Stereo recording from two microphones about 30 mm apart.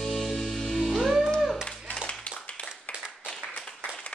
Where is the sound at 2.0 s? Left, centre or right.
Left.